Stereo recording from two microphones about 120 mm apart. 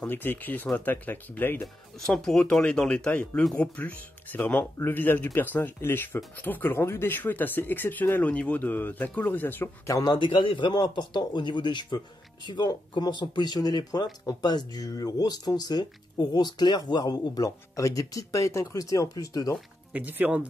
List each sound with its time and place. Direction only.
0.0 s speech: 15° left (ahead or behind)
2.0 s speech: centre (ahead or behind); by 9.9 s 15° left (ahead or behind)
9.9 s speech: 35° left (ahead or behind)
19.9 s speech: 10° right (ahead or behind)